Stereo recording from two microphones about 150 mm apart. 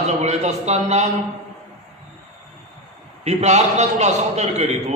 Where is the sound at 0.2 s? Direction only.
50° right (ahead or behind).